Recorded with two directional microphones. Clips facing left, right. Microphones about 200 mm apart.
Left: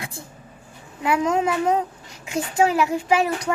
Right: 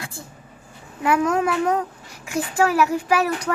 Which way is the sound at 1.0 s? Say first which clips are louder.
Right 1 dB; 15° left (ahead or behind).